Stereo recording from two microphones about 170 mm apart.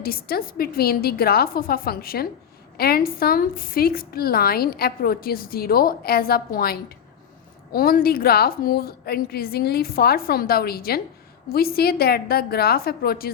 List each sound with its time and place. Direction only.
0.0 s a woman's voice: 60° left (ahead or behind)